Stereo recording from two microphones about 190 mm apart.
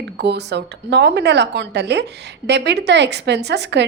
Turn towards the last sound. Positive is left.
turn(degrees=-65)  # may be behind; listen again after turning